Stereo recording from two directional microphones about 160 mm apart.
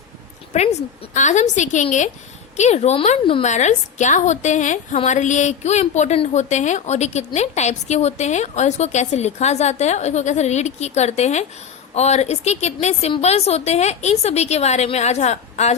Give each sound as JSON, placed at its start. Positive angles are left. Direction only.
{"t": 0.5, "sound": "a woman's voice", "side_deg": 45}